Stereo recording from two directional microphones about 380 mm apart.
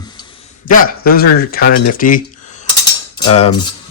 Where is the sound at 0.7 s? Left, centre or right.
Left.